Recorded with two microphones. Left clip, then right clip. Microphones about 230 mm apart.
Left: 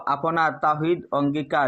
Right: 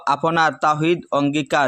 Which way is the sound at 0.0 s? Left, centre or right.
Right.